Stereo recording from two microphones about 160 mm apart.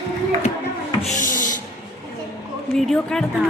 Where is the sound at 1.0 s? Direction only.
50° left (ahead or behind).